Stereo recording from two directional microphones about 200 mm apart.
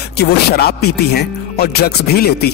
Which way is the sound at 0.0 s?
55° left (ahead or behind).